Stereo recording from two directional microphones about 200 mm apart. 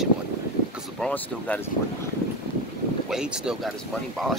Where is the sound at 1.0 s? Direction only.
10° left (ahead or behind).